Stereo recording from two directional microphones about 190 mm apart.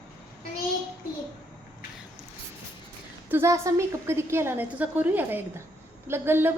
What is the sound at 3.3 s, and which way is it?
A woman's voice, 15° right (ahead or behind).